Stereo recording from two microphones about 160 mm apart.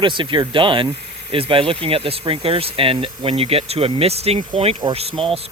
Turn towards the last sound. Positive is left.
turn(degrees=-35)  # may be behind; listen again after turning